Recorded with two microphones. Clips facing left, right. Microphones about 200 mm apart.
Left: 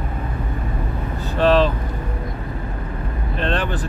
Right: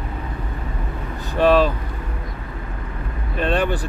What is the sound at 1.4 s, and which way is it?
Speech, 10° right (ahead or behind).